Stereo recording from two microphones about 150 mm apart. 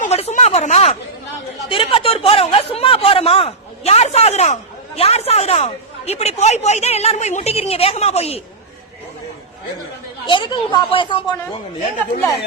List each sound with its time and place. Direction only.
0.0 s a sound: 45° left (ahead or behind)
1.7 s speech: 40° left (ahead or behind)
10.2 s speech: 30° left (ahead or behind)